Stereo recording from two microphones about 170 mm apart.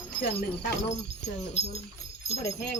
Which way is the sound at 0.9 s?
40° left (ahead or behind).